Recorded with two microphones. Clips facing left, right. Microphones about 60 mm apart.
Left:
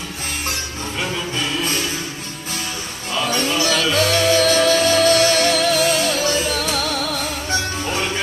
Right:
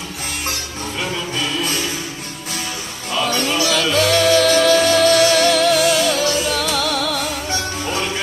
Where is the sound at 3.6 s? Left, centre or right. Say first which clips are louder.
Right 1 dB; left.